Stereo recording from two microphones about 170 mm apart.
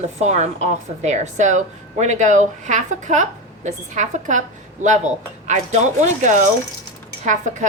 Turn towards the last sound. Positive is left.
turn(degrees=-45)  # may be behind; listen again after turning